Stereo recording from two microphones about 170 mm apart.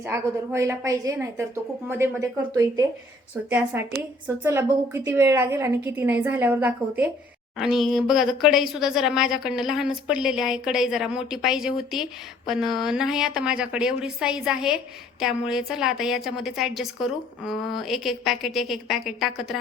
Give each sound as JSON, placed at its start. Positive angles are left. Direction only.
{"t": 0.0, "sound": "a woman's voice", "side_deg": -15}
{"t": 3.5, "sound": "a woman's voice", "side_deg": -10}